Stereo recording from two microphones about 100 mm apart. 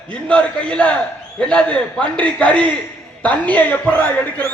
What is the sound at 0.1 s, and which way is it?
A man's voice, 10° left (ahead or behind).